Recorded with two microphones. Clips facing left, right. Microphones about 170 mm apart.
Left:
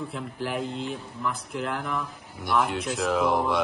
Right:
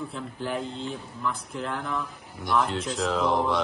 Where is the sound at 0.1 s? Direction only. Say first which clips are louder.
Even; centre (ahead or behind).